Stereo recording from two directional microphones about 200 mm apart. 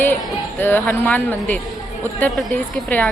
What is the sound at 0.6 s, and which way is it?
Speech, 10° left (ahead or behind).